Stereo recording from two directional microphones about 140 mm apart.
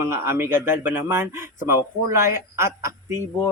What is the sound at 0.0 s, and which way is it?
Speech, 20° right (ahead or behind).